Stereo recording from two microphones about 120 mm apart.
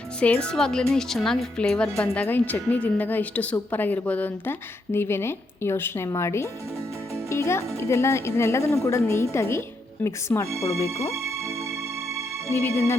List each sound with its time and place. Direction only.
0.2 s a woman's voice: 10° left (ahead or behind)
12.5 s speech: 20° left (ahead or behind)